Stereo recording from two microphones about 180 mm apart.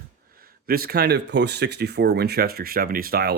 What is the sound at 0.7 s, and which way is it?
Speech, 55° right (ahead or behind).